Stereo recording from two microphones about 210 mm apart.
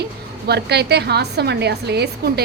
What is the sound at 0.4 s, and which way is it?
A woman's voice, 50° right (ahead or behind).